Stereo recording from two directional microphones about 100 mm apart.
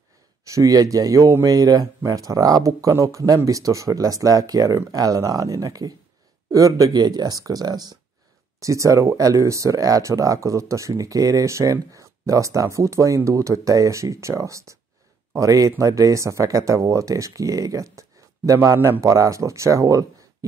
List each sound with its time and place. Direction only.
0.5 s speech: 35° right (ahead or behind)
8.5 s speech: 30° right (ahead or behind)